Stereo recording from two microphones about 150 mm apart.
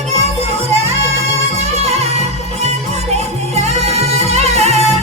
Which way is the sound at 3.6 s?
45° right (ahead or behind).